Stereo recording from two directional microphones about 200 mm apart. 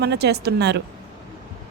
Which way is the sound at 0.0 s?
55° right (ahead or behind).